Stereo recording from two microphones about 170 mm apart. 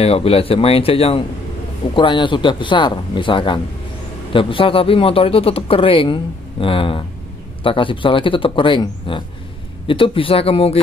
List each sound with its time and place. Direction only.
0.0 s speech: 35° left (ahead or behind)